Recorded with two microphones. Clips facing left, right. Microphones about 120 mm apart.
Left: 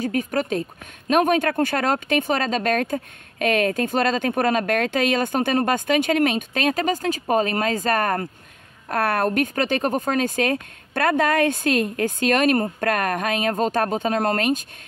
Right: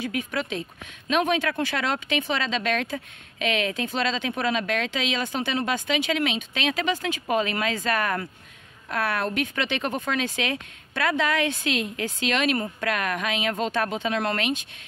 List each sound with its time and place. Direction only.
0.0 s a woman's voice: 45° left (ahead or behind)